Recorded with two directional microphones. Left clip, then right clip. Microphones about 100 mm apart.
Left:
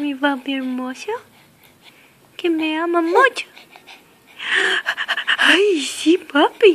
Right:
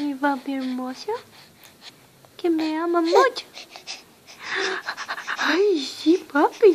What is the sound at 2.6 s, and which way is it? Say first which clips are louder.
Speech: left 3 dB; 30° left (ahead or behind).